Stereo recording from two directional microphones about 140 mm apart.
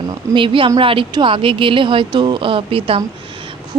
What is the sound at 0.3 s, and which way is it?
A woman's voice, 35° right (ahead or behind).